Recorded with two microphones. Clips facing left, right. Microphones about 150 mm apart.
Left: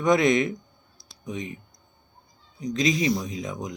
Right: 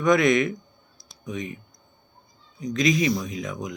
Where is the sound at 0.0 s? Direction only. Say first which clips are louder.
Right 1 dB; 30° left (ahead or behind).